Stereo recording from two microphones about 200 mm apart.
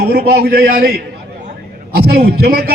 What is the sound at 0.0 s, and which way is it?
A man's voice, 50° right (ahead or behind).